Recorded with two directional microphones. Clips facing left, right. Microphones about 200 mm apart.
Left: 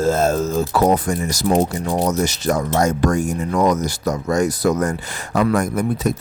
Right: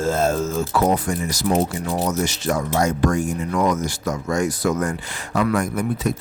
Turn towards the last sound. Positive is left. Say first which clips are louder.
# left 3 dB
turn(degrees=40)  # may be behind; listen again after turning